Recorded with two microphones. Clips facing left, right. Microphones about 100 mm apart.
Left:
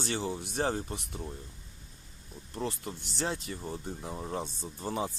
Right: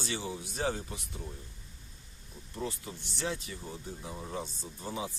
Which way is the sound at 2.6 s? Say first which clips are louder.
Left 3 dB; 60° left (ahead or behind).